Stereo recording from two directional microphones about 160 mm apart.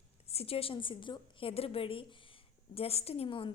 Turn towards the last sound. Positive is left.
turn(degrees=35)  # may be behind; listen again after turning